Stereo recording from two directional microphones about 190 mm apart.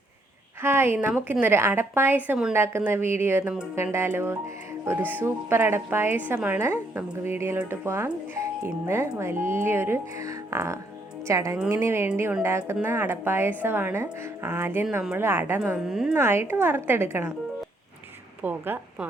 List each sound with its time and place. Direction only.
0.6 s a woman's voice: 10° right (ahead or behind)
18.4 s a woman's voice: 10° right (ahead or behind)